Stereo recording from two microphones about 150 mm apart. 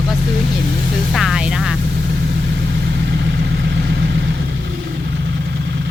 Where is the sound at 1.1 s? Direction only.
Centre (ahead or behind).